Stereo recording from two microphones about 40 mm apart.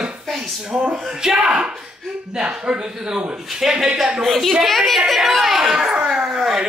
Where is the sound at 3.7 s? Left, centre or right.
Centre.